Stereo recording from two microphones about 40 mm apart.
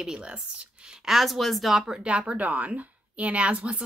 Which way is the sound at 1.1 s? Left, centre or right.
Centre.